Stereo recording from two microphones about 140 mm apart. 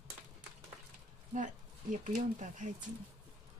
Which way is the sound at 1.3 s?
65° right (ahead or behind).